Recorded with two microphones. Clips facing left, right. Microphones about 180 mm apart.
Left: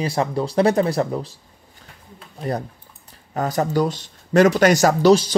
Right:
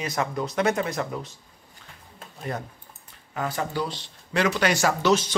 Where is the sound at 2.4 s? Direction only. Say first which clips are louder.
Left 7 dB; 35° left (ahead or behind).